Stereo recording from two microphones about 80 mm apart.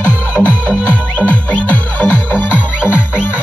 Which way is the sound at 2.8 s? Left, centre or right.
Centre.